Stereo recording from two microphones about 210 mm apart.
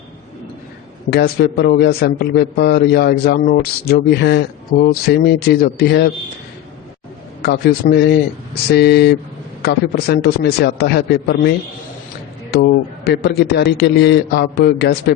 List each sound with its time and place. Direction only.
1.1 s a man's voice: 50° left (ahead or behind)
7.4 s a man's voice: 50° left (ahead or behind)
12.5 s a man's voice: 50° left (ahead or behind)